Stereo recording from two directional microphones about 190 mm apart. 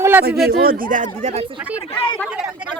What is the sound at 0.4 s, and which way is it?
Speech, 50° right (ahead or behind).